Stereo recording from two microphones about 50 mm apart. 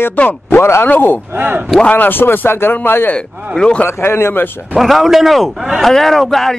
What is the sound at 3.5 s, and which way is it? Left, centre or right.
Speech, centre.